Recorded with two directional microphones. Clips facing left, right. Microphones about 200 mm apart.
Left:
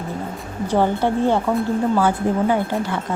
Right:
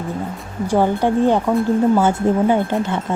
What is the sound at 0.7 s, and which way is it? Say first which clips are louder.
Speech: right 2 dB; 15° right (ahead or behind).